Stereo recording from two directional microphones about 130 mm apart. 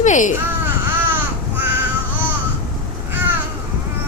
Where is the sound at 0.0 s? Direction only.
75° left (ahead or behind).